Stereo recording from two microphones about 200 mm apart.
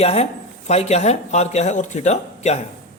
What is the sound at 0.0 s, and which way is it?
A man's voice, 30° left (ahead or behind).